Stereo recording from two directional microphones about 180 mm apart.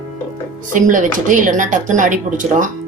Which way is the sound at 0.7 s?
45° right (ahead or behind).